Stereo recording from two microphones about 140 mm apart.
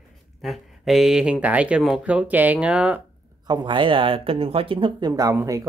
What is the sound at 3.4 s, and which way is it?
Speech, 30° right (ahead or behind).